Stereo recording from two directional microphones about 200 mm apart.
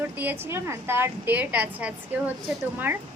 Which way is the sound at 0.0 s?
10° right (ahead or behind).